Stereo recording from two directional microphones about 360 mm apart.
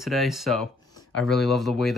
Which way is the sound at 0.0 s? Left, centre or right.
Centre.